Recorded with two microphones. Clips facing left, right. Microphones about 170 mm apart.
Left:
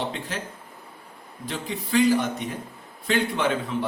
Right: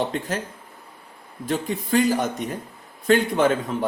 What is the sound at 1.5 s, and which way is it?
A man's voice, 45° right (ahead or behind).